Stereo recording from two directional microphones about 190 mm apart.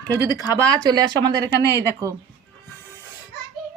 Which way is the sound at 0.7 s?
20° right (ahead or behind).